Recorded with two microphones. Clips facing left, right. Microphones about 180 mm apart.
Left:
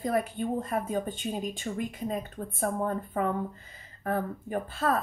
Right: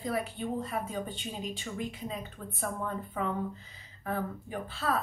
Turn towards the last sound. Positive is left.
turn(degrees=45)  # may be behind; listen again after turning